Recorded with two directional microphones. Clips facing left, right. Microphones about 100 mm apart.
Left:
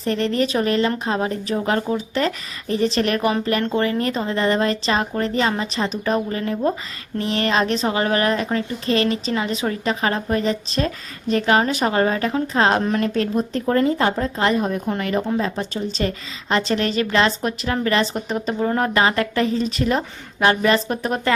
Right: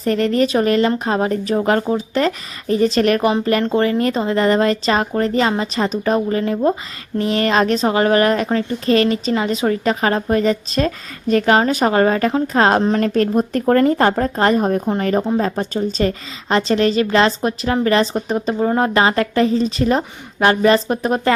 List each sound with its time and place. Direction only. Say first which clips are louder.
0.0 s a woman's voice: right 4 dB; 40° right (ahead or behind)